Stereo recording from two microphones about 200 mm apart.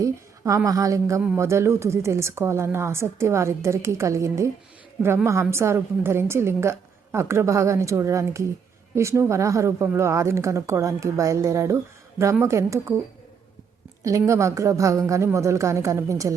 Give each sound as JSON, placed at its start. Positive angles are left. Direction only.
{"t": 0.0, "sound": "a woman's voice", "side_deg": -15}
{"t": 14.0, "sound": "a woman's voice", "side_deg": -15}